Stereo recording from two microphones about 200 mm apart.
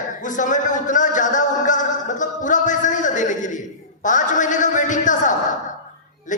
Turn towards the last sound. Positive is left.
turn(degrees=40)  # may be behind; listen again after turning